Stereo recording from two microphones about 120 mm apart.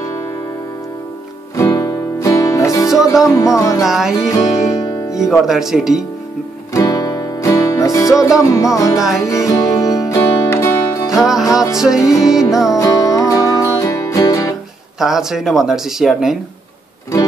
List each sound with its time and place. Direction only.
1.6 s music: 25° left (ahead or behind)
3.8 s speech: 5° right (ahead or behind)
4.3 s music: 25° left (ahead or behind)
5.1 s speech: 5° right (ahead or behind)
6.7 s music: 25° left (ahead or behind)
11.7 s speech: 5° right (ahead or behind)
12.7 s music: 30° left (ahead or behind)
15.0 s speech: 5° right (ahead or behind)